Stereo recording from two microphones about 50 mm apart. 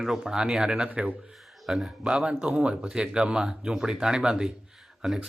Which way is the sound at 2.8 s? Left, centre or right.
Centre.